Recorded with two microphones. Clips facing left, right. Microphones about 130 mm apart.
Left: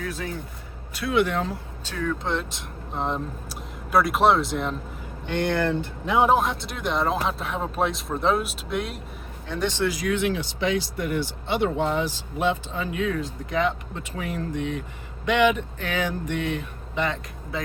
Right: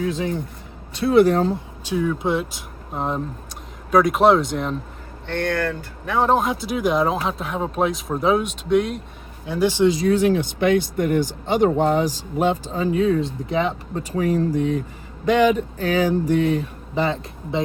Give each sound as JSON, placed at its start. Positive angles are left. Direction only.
{"t": 0.0, "sound": "speech", "side_deg": -20}
{"t": 0.9, "sound": "speech", "side_deg": -35}
{"t": 1.8, "sound": "speech", "side_deg": -15}
{"t": 5.2, "sound": "speech", "side_deg": 15}
{"t": 6.3, "sound": "speech", "side_deg": 0}
{"t": 9.8, "sound": "speech", "side_deg": -25}